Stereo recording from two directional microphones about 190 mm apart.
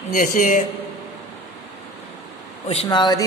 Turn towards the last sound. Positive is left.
turn(degrees=20)  # may be behind; listen again after turning